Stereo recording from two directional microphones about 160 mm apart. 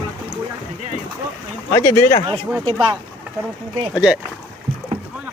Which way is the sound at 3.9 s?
5° right (ahead or behind).